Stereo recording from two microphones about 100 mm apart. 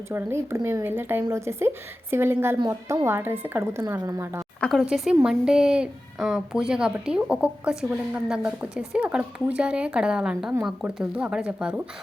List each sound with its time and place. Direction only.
0.1 s speech: 25° right (ahead or behind)
4.7 s a woman's voice: 5° right (ahead or behind)